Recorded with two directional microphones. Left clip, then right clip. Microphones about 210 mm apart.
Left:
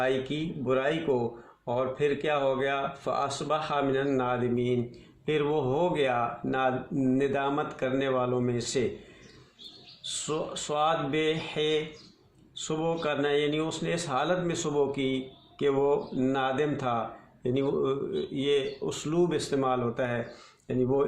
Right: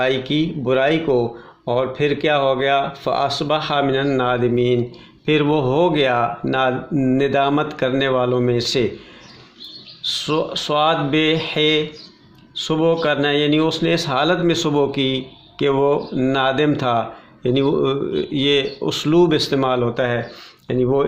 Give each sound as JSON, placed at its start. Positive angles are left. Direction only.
{"t": 0.0, "sound": "speech", "side_deg": -35}
{"t": 7.2, "sound": "speech", "side_deg": -35}
{"t": 10.5, "sound": "speech", "side_deg": -35}